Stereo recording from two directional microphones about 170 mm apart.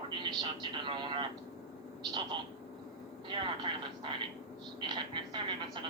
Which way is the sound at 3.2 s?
30° right (ahead or behind).